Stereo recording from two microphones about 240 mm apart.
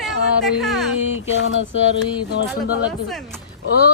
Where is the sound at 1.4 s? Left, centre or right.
Left.